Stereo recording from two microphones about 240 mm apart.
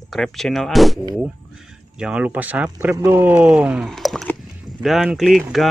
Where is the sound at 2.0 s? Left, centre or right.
Centre.